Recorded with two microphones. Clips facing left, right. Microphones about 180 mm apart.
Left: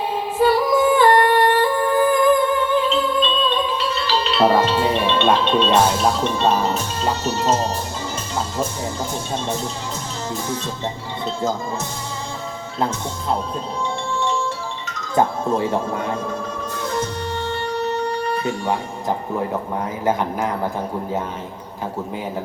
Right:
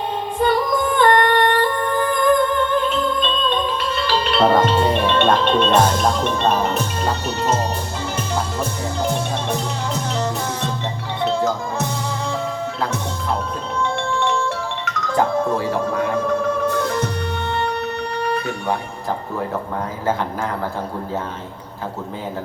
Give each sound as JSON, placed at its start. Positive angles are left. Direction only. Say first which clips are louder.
{"t": 0.3, "sound": "music", "louder": "left 3 dB", "side_deg": 5}
{"t": 4.0, "sound": "music", "louder": "right 3 dB", "side_deg": -50}
{"t": 4.4, "sound": "speech", "louder": "even", "side_deg": 5}
{"t": 4.7, "sound": "music", "louder": "right 2 dB", "side_deg": 5}
{"t": 4.9, "sound": "music", "louder": "right 1 dB", "side_deg": -50}
{"t": 5.2, "sound": "music", "louder": "even", "side_deg": 5}
{"t": 6.5, "sound": "music", "louder": "even", "side_deg": -55}
{"t": 15.1, "sound": "speech", "louder": "even", "side_deg": 20}
{"t": 16.1, "sound": "music", "louder": "right 7 dB", "side_deg": -65}